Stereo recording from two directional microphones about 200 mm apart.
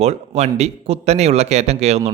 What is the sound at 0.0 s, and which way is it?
A man's voice, 30° right (ahead or behind).